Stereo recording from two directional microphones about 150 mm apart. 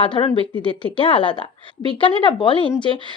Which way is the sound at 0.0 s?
35° left (ahead or behind).